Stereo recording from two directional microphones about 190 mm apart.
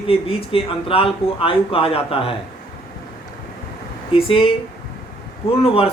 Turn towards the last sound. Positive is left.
turn(degrees=30)  # may be behind; listen again after turning